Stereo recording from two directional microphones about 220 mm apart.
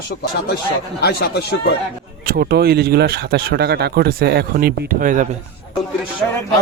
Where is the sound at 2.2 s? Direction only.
45° right (ahead or behind).